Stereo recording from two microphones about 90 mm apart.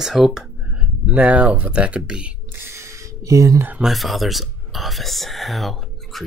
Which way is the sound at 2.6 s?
30° right (ahead or behind).